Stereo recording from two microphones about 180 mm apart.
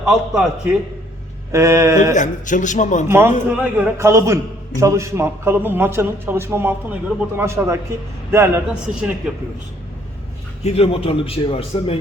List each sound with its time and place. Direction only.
0.0 s a man's voice: 5° right (ahead or behind)
1.5 s a man's voice: 15° right (ahead or behind)
2.1 s a man's voice: 45° left (ahead or behind)
3.1 s a man's voice: 10° right (ahead or behind)
10.6 s a man's voice: 35° left (ahead or behind)